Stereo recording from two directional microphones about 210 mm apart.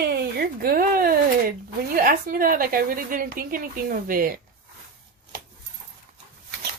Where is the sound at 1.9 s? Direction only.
45° right (ahead or behind).